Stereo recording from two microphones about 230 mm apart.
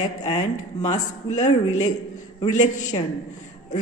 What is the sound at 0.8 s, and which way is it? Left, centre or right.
Speech, left.